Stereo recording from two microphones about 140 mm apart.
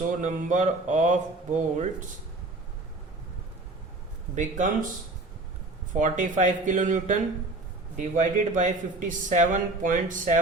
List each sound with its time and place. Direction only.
0.2 s a man's voice: 65° right (ahead or behind)
4.4 s a man's voice: 65° right (ahead or behind)
5.9 s a man's voice: 65° right (ahead or behind)